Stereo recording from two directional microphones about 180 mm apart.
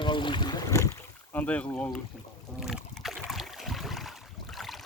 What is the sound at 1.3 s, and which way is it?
Speech, 10° left (ahead or behind).